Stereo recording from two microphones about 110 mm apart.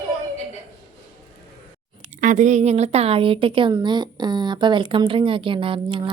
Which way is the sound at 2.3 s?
90° right.